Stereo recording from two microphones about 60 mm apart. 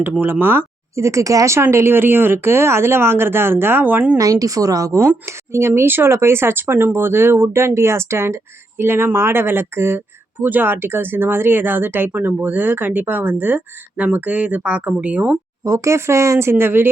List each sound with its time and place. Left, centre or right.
0.2 s speech: right
0.9 s speech: right
1.5 s speech: right
4.2 s speech: right
4.9 s speech: right
15.6 s speech: right